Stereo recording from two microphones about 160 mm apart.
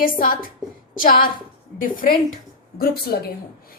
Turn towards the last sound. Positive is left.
turn(degrees=75)  # may be behind; listen again after turning